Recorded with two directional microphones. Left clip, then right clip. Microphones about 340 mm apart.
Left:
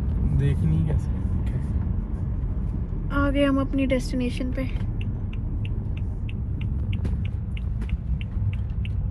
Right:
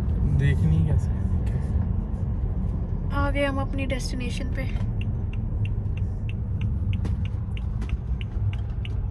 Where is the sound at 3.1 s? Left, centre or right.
Centre.